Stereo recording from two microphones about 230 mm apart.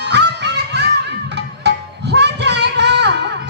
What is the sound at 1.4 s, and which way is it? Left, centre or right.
Music, right.